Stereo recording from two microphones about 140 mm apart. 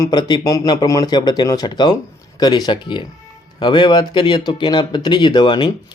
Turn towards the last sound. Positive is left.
turn(degrees=35)  # may be behind; listen again after turning